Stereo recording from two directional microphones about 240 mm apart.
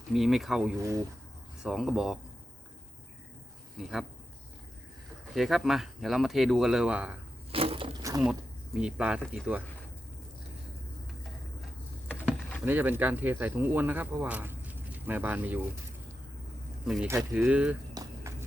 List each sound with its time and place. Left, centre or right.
0.1 s speech: centre
3.8 s speech: centre
5.3 s speech: centre
7.5 s a sound: right
8.2 s speech: centre
12.2 s speech: centre
16.8 s speech: centre
17.9 s a sound: centre